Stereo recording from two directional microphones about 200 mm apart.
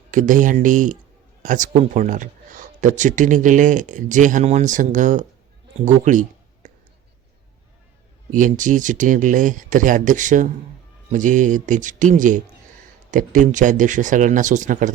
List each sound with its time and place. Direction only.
0.1 s speech: 40° right (ahead or behind)
8.3 s speech: 40° right (ahead or behind)